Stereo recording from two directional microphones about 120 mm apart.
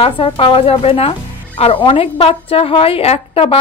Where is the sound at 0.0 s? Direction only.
50° left (ahead or behind).